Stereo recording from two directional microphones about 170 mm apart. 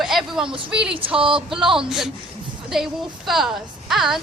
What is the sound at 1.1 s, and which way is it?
Speech, 30° right (ahead or behind).